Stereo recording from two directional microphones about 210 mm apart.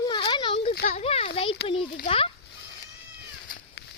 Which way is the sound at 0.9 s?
30° left (ahead or behind).